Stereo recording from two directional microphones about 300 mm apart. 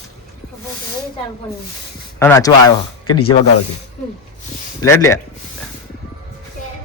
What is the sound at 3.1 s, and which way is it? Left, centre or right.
Speech, left.